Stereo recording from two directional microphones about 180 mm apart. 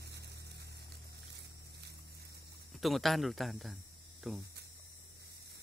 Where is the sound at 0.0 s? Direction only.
65° right (ahead or behind).